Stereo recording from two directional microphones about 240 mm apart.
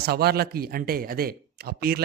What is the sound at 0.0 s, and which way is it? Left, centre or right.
Speech, right.